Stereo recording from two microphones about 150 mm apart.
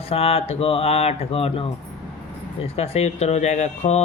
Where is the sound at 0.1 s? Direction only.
40° left (ahead or behind).